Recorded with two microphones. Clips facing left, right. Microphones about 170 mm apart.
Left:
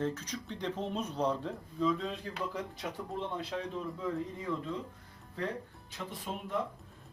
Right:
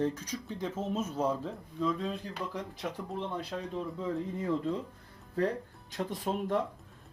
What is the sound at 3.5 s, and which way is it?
Speech, centre (ahead or behind).